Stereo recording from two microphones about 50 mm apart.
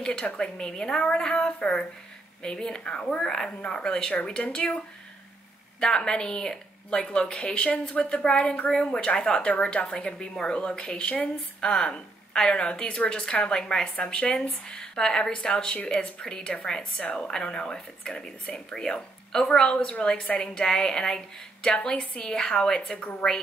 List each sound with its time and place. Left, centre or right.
0.0 s speech: left